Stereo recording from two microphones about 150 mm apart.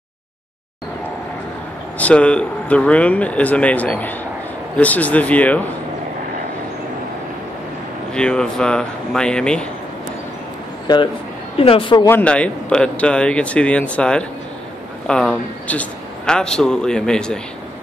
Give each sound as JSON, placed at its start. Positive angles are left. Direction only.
{"t": 2.0, "sound": "speech", "side_deg": 10}
{"t": 8.1, "sound": "a man's voice", "side_deg": 5}
{"t": 11.5, "sound": "speech", "side_deg": 40}
{"t": 12.1, "sound": "a man's voice", "side_deg": 10}